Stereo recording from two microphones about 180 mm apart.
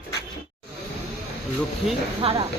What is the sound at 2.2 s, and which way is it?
Speech, 30° right (ahead or behind).